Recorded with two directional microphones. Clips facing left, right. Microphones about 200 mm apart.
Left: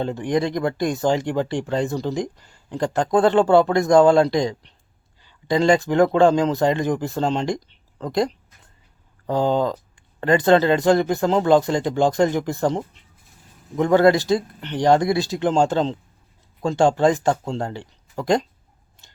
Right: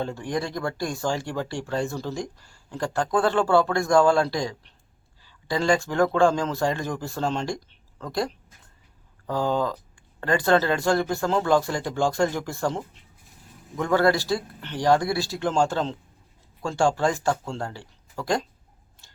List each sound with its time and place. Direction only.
0.0 s speech: 20° left (ahead or behind)
19.0 s scissors: 20° left (ahead or behind)